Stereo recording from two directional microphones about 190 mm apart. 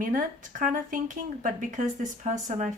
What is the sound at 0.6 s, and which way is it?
Speech, 45° right (ahead or behind).